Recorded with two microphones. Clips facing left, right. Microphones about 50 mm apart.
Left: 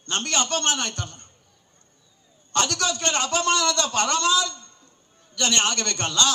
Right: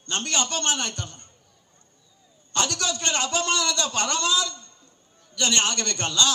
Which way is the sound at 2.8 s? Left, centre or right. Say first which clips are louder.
Left 2 dB; left.